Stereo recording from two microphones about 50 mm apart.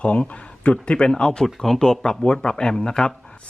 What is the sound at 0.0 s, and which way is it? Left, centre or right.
Speech, left.